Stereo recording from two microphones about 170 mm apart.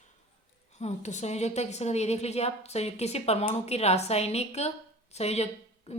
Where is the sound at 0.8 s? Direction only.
40° left (ahead or behind).